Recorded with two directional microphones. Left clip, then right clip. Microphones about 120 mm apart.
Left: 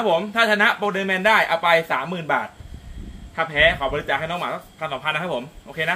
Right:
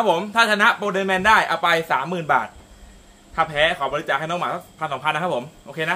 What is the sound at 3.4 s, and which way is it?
Speech, 35° right (ahead or behind).